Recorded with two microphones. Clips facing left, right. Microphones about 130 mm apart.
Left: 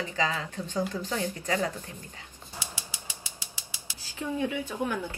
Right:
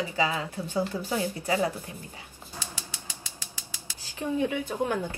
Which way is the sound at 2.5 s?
15° left (ahead or behind).